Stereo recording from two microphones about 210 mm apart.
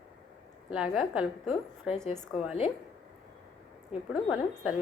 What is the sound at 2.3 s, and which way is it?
Speech, 25° left (ahead or behind).